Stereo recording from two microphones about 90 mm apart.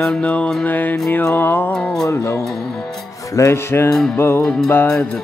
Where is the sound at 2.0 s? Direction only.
30° left (ahead or behind).